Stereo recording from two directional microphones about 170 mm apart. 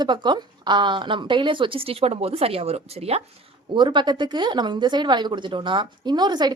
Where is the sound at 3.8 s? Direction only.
25° right (ahead or behind).